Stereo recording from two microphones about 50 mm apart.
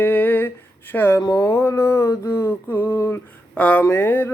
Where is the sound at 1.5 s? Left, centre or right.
Left.